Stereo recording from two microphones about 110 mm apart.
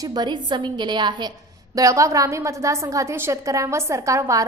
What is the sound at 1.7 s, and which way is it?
A woman's voice, 30° right (ahead or behind).